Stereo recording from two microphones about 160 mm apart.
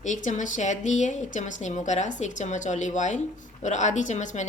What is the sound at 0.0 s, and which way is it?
A woman's voice, 50° left (ahead or behind).